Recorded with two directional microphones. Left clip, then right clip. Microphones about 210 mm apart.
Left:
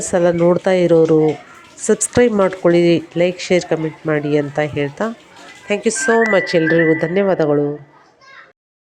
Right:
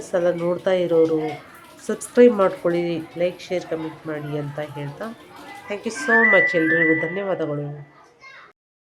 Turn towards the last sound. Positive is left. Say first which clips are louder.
# left 10 dB
turn(degrees=25)  # may be behind; listen again after turning